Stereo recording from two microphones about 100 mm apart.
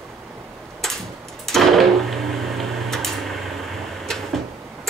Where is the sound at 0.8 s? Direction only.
5° left (ahead or behind).